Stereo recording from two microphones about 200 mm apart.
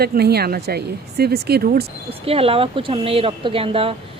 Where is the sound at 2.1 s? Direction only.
30° right (ahead or behind).